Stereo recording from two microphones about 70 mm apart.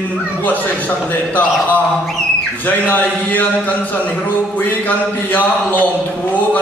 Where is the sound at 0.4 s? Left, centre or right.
Left.